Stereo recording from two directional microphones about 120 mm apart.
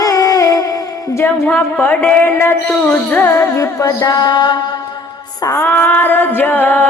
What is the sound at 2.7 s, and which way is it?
Music, 10° left (ahead or behind).